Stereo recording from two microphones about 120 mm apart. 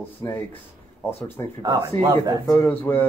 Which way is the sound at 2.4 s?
20° left (ahead or behind).